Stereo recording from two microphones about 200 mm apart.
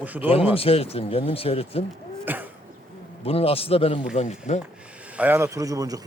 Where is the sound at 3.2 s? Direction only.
30° left (ahead or behind).